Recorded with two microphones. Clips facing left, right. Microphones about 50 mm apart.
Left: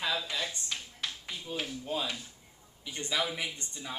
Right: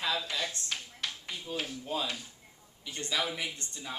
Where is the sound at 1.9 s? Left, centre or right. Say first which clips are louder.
Even; centre.